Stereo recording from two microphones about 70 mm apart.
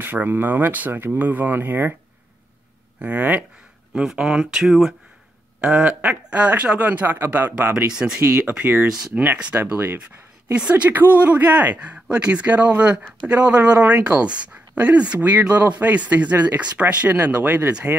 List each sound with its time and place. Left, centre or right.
0.0 s speech: right
3.0 s speech: right
3.9 s speech: centre
5.6 s speech: centre
7.7 s speech: centre
8.2 s speech: right